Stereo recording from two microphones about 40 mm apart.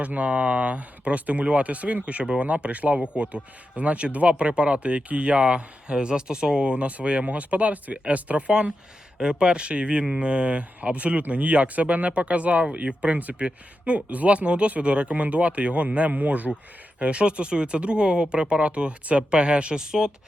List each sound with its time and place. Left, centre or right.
0.2 s speech: right
9.1 s speech: right